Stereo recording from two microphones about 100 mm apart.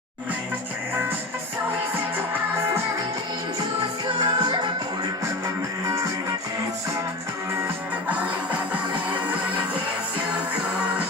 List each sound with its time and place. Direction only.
4.0 s music: 50° right (ahead or behind)